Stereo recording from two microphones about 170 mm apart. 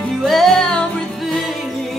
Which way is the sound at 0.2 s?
Centre (ahead or behind).